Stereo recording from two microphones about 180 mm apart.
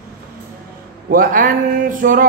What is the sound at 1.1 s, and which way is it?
Speech, 50° right (ahead or behind).